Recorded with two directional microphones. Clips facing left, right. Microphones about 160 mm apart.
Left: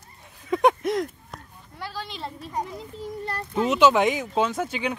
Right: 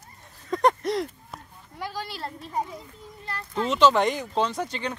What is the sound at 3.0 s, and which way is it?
Speech, 55° left (ahead or behind).